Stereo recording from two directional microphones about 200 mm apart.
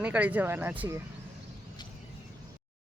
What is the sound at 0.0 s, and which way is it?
Speech, 5° right (ahead or behind).